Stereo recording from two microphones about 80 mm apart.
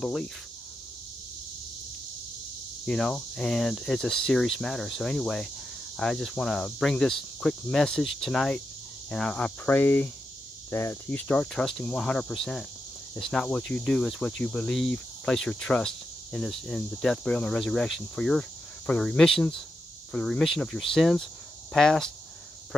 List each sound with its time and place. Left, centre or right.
0.0 s speech: centre
2.8 s cricket: centre
5.9 s speech: centre
9.7 s cricket: left
11.3 s speech: centre
17.8 s cricket: centre
18.9 s speech: centre
20.1 s cricket: centre